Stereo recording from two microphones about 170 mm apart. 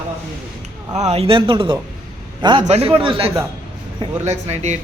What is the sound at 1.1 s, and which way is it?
A man's voice, 35° right (ahead or behind).